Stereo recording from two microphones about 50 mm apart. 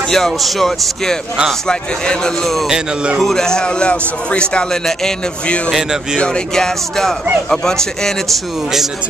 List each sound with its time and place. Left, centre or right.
0.1 s speech: centre; by 4.6 s left
5.7 s speech: centre
6.1 s speech: centre